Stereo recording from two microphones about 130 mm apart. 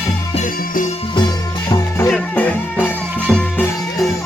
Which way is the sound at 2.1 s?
15° left (ahead or behind).